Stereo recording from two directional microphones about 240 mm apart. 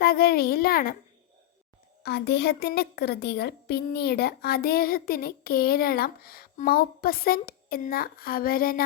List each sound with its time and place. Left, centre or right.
0.0 s a woman's voice: left
2.0 s a woman's voice: left